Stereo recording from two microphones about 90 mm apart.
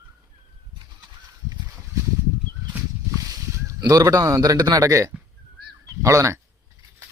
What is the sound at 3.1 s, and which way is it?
Speech, 40° right (ahead or behind).